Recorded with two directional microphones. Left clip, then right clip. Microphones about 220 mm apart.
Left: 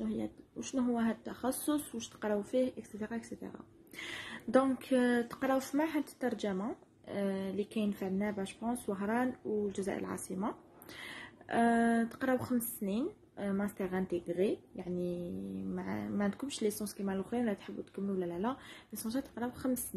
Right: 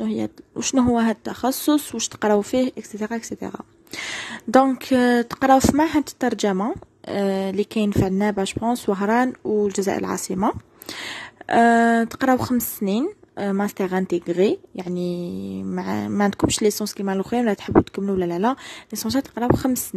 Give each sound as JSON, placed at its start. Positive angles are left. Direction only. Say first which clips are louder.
{"t": 0.0, "sound": "speech", "louder": "right 13 dB", "side_deg": -45}